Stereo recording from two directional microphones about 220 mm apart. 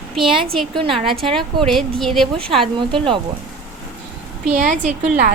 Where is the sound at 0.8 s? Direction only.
25° right (ahead or behind).